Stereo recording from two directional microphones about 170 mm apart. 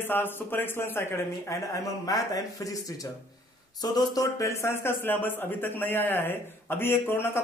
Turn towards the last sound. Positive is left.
turn(degrees=15)  # may be behind; listen again after turning